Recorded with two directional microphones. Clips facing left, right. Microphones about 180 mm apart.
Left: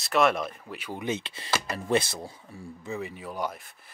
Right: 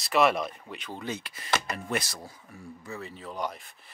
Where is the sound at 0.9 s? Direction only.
20° left (ahead or behind).